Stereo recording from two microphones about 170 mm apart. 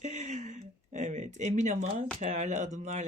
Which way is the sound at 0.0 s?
45° right (ahead or behind).